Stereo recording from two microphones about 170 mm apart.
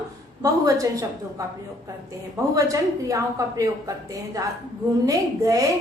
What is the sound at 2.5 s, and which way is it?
A woman's voice, 20° right (ahead or behind).